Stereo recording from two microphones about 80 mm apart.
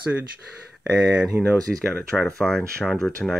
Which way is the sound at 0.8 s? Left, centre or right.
Centre.